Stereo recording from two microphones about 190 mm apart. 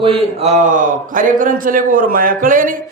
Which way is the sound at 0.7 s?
45° right (ahead or behind).